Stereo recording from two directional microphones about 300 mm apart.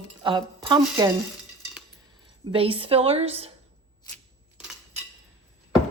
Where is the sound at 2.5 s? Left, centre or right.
Centre.